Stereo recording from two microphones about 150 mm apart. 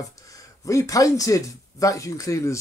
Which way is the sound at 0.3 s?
20° left (ahead or behind).